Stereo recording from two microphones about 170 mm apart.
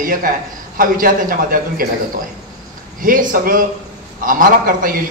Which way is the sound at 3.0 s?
55° right (ahead or behind).